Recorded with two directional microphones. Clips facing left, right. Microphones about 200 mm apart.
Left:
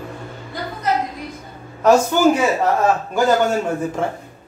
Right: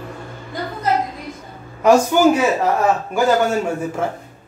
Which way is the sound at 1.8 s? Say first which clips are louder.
Right 1 dB; 10° right (ahead or behind).